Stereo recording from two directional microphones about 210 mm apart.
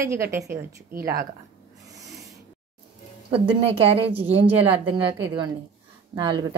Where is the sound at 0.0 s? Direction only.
15° right (ahead or behind).